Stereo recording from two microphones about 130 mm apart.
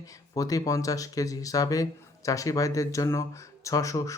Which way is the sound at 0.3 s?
25° left (ahead or behind).